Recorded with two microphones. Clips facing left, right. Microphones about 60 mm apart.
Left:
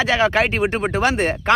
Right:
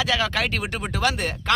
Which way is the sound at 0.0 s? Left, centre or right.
Left.